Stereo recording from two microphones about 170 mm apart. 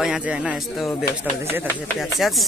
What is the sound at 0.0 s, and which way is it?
Speech, 5° right (ahead or behind).